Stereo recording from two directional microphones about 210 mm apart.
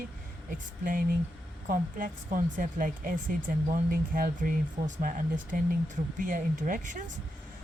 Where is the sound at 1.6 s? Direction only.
40° right (ahead or behind).